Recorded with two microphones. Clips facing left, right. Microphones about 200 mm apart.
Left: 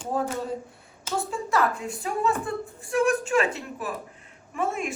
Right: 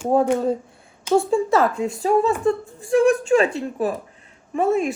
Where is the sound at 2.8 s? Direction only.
30° right (ahead or behind).